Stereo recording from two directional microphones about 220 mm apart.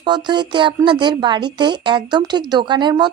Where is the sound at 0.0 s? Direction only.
20° right (ahead or behind).